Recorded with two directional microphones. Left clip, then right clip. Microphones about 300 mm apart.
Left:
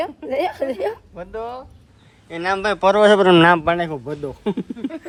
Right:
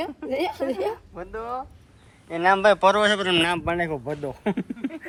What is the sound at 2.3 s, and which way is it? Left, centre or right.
Speech, centre.